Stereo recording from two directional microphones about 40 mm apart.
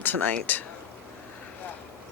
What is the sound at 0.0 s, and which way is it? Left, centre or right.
Speech, left.